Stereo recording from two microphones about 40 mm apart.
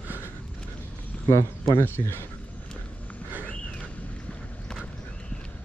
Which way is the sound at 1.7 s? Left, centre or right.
Left.